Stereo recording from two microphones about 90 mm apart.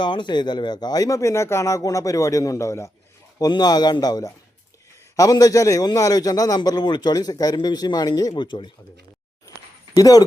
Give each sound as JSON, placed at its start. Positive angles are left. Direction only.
{"t": 0.0, "sound": "speech", "side_deg": 60}
{"t": 3.3, "sound": "speech", "side_deg": 50}
{"t": 6.6, "sound": "speech", "side_deg": 55}
{"t": 9.9, "sound": "speech", "side_deg": 45}